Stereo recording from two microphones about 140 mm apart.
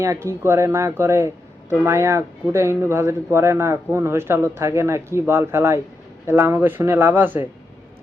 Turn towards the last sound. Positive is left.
turn(degrees=-15)  # may be behind; listen again after turning